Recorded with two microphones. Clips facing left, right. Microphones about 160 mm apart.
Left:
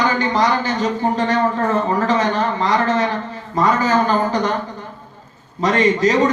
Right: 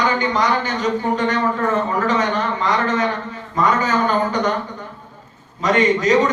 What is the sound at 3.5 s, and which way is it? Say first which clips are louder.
Speech: left 2 dB; 35° left (ahead or behind).